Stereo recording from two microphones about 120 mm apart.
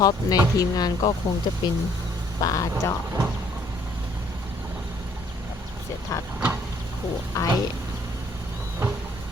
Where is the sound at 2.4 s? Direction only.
30° left (ahead or behind).